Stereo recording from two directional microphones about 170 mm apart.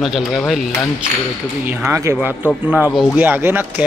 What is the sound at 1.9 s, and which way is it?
Speech, 15° right (ahead or behind).